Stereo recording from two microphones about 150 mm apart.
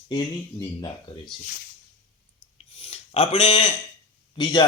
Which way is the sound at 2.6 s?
40° left (ahead or behind).